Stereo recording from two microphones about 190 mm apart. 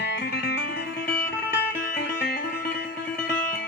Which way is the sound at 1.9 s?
50° left (ahead or behind).